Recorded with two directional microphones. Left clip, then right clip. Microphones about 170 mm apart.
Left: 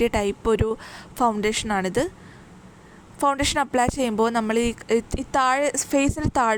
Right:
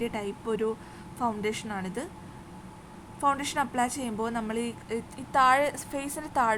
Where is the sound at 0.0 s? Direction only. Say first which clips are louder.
Left 11 dB; 60° left (ahead or behind).